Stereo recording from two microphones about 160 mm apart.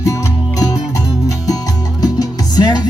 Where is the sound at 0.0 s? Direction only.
20° left (ahead or behind).